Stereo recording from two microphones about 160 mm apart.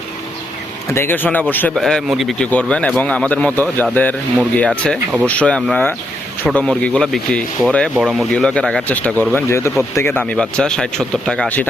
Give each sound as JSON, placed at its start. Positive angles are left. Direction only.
{"t": 0.9, "sound": "a man's voice", "side_deg": 15}
{"t": 10.1, "sound": "speech", "side_deg": 5}